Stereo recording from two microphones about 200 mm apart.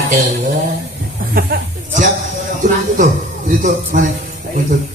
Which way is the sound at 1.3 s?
50° right (ahead or behind).